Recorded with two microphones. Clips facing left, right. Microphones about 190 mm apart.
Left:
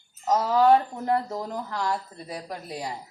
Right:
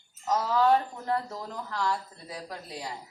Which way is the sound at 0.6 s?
15° left (ahead or behind).